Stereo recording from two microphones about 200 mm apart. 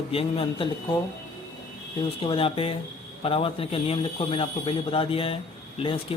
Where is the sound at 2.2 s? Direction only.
30° left (ahead or behind).